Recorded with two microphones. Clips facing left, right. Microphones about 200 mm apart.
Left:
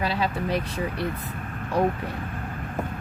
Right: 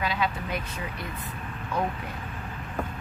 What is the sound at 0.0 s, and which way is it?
Speech, 35° left (ahead or behind).